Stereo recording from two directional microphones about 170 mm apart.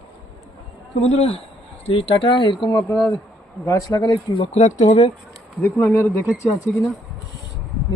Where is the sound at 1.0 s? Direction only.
40° left (ahead or behind).